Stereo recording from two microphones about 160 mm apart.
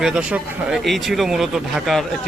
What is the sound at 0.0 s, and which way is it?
A man's voice, 5° right (ahead or behind).